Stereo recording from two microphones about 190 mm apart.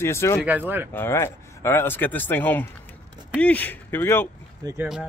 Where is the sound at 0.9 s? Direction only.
10° left (ahead or behind).